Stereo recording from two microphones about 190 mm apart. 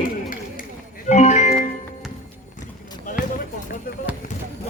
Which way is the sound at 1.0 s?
40° left (ahead or behind).